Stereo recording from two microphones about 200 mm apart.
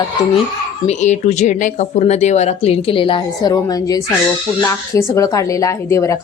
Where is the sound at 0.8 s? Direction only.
35° left (ahead or behind).